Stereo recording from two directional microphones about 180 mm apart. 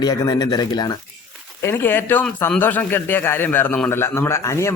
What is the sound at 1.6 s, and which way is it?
A man's voice, 10° left (ahead or behind).